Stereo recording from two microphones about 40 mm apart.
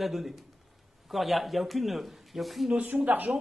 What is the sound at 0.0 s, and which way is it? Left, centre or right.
Speech, centre.